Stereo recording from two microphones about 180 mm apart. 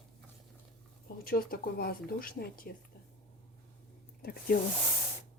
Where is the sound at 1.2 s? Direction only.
55° left (ahead or behind).